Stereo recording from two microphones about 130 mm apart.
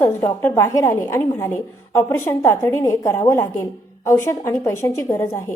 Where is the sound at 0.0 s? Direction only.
20° left (ahead or behind).